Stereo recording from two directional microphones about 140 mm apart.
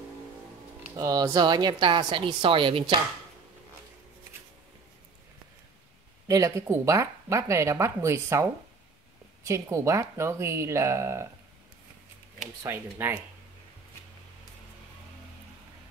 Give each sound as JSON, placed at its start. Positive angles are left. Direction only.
{"t": 0.9, "sound": "a woman's voice", "side_deg": -25}
{"t": 6.2, "sound": "speech", "side_deg": -20}
{"t": 9.5, "sound": "speech", "side_deg": -20}
{"t": 12.6, "sound": "speech", "side_deg": -15}